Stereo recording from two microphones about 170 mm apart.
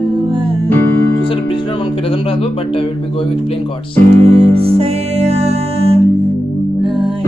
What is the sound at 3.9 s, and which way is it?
Music, 35° right (ahead or behind).